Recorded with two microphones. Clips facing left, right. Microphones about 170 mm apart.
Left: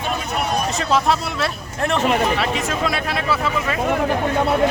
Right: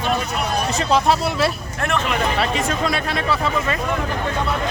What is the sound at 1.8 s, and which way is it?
Speech, 30° left (ahead or behind).